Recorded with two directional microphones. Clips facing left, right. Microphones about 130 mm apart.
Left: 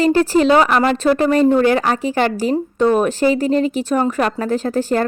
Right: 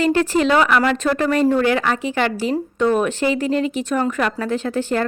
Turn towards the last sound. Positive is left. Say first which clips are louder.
# left 3 dB
turn(degrees=40)  # may be behind; listen again after turning